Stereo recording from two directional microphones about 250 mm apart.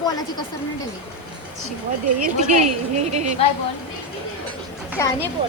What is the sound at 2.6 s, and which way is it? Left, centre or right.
Speech, right.